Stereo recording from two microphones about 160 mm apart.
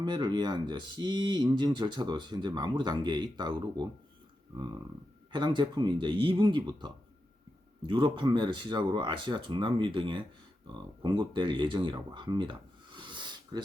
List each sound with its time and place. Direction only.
0.0 s speech: 30° right (ahead or behind)
5.3 s speech: 30° right (ahead or behind)